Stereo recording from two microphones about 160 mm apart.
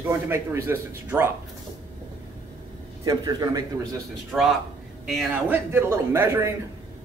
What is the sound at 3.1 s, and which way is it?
Speech, 25° right (ahead or behind).